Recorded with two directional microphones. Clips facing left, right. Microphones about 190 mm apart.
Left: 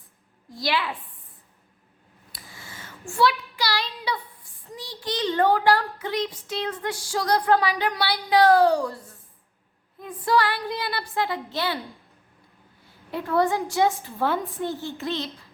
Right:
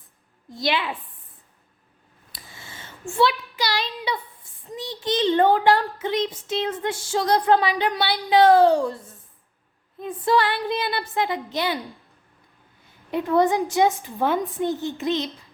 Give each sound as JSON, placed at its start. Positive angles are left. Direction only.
{"t": 0.5, "sound": "a child's voice", "side_deg": -20}
{"t": 2.3, "sound": "a sound", "side_deg": -25}
{"t": 4.6, "sound": "a child's voice", "side_deg": -20}
{"t": 12.8, "sound": "a child's voice", "side_deg": -20}